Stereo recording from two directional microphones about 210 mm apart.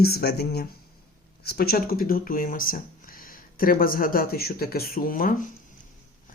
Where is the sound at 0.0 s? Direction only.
50° left (ahead or behind).